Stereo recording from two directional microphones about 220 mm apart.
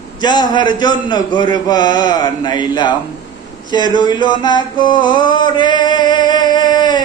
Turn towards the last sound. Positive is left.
turn(degrees=20)  # may be behind; listen again after turning